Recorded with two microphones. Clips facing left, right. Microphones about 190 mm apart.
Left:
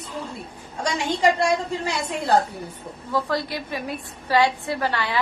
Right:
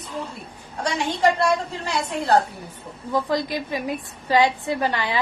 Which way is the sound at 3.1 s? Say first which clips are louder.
Right 2 dB; 15° right (ahead or behind).